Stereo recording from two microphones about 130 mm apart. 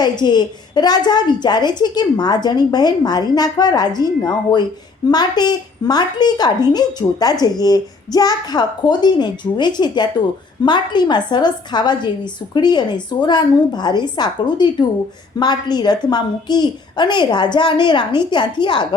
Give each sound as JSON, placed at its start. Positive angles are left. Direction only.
{"t": 0.0, "sound": "a woman's voice", "side_deg": 35}